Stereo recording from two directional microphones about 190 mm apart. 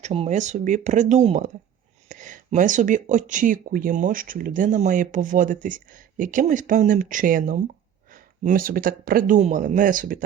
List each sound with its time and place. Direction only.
0.0 s speech: 35° right (ahead or behind)